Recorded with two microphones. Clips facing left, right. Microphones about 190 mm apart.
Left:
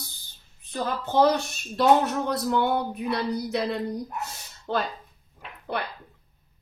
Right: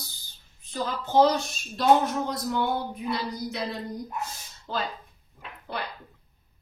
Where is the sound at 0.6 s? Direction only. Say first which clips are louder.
Left 2 dB; 60° left (ahead or behind).